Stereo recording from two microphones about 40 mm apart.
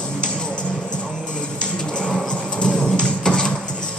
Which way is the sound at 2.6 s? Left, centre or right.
Centre.